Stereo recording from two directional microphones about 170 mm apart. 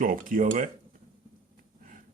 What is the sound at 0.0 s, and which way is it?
Speech, 55° right (ahead or behind).